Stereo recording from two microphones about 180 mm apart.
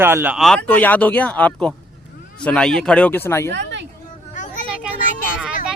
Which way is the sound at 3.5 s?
75° right (ahead or behind).